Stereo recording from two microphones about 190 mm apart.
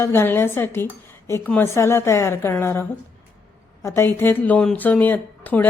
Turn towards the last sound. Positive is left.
turn(degrees=10)  # may be behind; listen again after turning